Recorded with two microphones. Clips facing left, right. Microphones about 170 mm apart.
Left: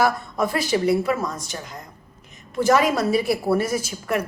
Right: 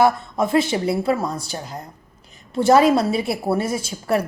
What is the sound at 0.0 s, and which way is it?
A woman's voice, 25° right (ahead or behind).